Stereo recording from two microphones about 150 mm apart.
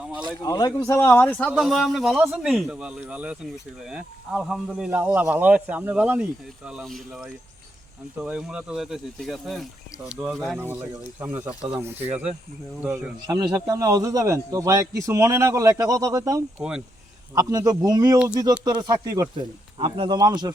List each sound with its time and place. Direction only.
0.3 s a man's voice: 25° left (ahead or behind); by 12.1 s 15° right (ahead or behind)
13.2 s a man's voice: 25° right (ahead or behind)
16.6 s speech: 5° right (ahead or behind)
17.3 s a man's voice: 25° right (ahead or behind)